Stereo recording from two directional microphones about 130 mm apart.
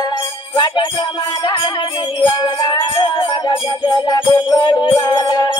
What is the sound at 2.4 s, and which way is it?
Music, 30° left (ahead or behind).